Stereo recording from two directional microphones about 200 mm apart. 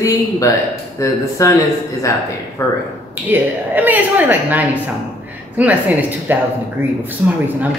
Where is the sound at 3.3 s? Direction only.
10° right (ahead or behind).